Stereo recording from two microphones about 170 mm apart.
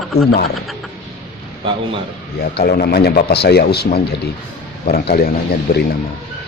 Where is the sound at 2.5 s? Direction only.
60° left (ahead or behind).